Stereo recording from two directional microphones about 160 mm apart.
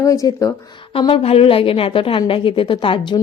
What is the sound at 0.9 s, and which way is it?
Speech, 35° left (ahead or behind).